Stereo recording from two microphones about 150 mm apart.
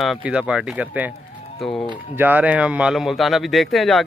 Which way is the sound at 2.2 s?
10° right (ahead or behind).